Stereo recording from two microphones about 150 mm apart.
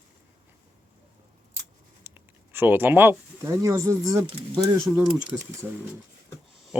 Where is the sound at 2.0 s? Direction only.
15° right (ahead or behind).